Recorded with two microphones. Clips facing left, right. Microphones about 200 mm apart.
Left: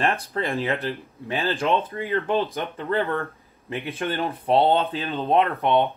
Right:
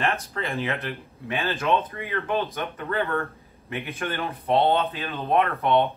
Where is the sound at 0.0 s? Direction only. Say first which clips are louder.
Left 3 dB; 30° left (ahead or behind).